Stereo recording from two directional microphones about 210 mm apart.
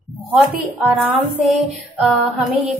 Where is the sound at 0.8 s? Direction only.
Centre (ahead or behind).